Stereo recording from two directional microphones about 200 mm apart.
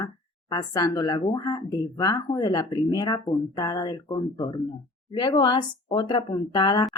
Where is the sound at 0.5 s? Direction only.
20° left (ahead or behind).